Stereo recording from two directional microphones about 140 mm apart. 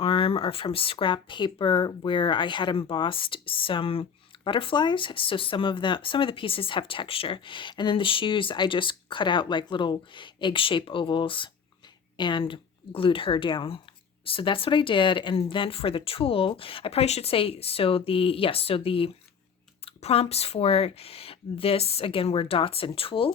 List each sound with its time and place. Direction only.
0.0 s speech: 40° left (ahead or behind)